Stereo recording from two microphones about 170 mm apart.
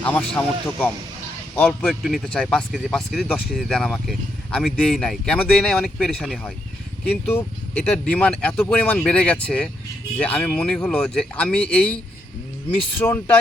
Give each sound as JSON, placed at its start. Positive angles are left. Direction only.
{"t": 0.0, "sound": "speech", "side_deg": 10}
{"t": 13.0, "sound": "speech", "side_deg": 10}